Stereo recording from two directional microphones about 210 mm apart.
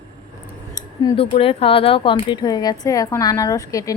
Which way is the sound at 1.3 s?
25° left (ahead or behind).